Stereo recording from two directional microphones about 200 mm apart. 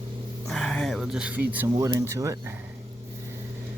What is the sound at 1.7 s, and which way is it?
Speech, 15° right (ahead or behind).